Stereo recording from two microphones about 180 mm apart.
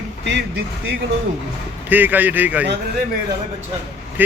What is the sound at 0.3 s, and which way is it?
Speech, 75° right (ahead or behind).